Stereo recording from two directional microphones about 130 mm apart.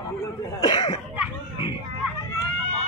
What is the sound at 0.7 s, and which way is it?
Cough, 35° left (ahead or behind).